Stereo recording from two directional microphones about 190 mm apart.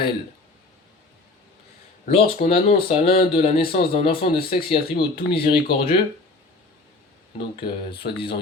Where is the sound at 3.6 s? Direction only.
55° left (ahead or behind).